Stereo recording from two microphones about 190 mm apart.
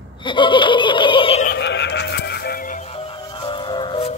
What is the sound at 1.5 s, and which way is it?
Music, 65° left (ahead or behind).